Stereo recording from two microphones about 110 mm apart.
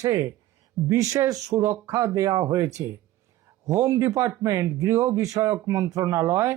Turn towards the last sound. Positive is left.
turn(degrees=-25)  # may be behind; listen again after turning